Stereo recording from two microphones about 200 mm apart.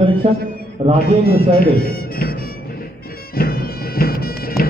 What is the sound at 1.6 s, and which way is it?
Music, 50° left (ahead or behind).